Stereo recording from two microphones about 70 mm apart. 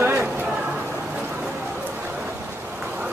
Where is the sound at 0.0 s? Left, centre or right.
Right.